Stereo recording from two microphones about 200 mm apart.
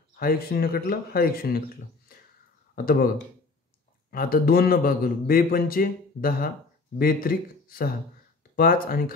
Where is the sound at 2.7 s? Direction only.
45° left (ahead or behind).